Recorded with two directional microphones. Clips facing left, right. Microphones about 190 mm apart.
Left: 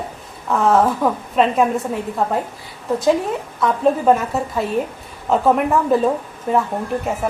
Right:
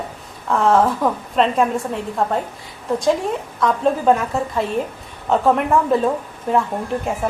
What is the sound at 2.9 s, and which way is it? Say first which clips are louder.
A woman's voice: left 1 dB; centre (ahead or behind).